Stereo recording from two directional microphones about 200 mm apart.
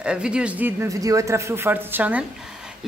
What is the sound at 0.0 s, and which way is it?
A woman's voice, 5° right (ahead or behind).